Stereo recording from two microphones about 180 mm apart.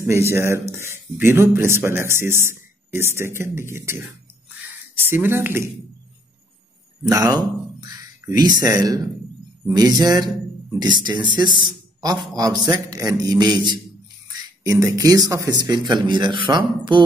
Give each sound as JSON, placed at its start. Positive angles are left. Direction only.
{"t": 0.0, "sound": "speech", "side_deg": -15}
{"t": 7.1, "sound": "speech", "side_deg": -20}
{"t": 14.6, "sound": "speech", "side_deg": -20}